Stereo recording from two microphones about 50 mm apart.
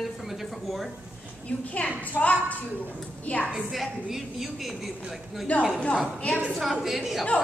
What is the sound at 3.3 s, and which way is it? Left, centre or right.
Speech, left.